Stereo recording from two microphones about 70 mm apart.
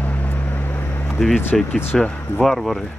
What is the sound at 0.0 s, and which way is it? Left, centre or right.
Vehicle, left.